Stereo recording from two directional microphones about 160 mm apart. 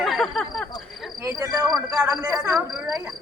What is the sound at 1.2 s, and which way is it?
A man's voice, 20° right (ahead or behind).